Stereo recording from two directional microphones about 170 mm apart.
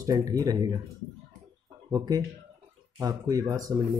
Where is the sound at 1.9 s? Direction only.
25° right (ahead or behind).